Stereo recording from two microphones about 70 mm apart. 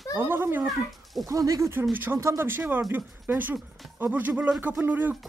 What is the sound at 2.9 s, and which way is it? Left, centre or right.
Speech, right.